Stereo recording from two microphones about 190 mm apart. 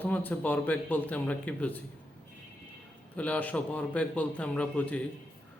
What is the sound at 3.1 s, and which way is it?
Speech, 5° left (ahead or behind).